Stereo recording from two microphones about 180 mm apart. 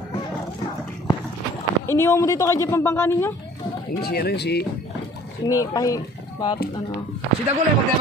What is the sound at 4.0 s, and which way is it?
Speech, 60° left (ahead or behind).